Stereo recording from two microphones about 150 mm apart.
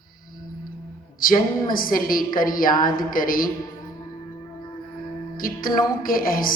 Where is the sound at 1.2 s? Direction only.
70° left (ahead or behind).